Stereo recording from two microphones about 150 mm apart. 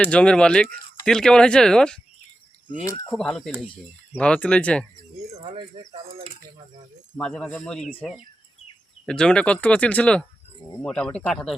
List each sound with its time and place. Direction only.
0.0 s speech: 5° left (ahead or behind)
2.8 s speech: 20° left (ahead or behind)
3.1 s speech: centre (ahead or behind)
5.3 s speech: 35° right (ahead or behind)
7.2 s speech: 5° left (ahead or behind)
9.0 s speech: 5° left (ahead or behind)